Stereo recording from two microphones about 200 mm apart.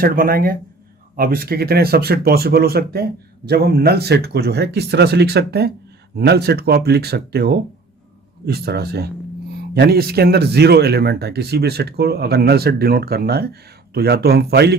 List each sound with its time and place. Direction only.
0.0 s speech: 45° right (ahead or behind)